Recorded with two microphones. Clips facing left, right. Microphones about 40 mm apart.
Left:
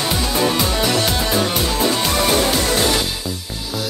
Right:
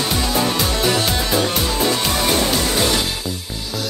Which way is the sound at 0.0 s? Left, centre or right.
Centre.